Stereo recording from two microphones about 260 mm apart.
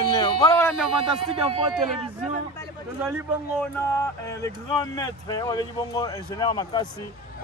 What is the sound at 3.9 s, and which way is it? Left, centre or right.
Speech, centre.